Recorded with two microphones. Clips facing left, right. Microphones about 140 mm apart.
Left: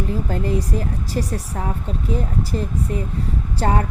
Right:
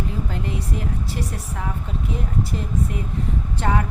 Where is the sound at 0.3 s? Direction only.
40° left (ahead or behind).